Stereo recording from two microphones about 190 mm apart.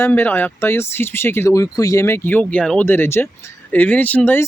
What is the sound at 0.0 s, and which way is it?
Speech, 10° left (ahead or behind).